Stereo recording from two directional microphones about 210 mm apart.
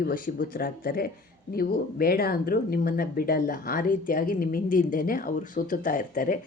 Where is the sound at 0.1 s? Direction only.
40° left (ahead or behind).